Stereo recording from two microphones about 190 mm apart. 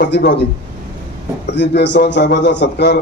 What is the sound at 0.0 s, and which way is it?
Speech, 65° left (ahead or behind).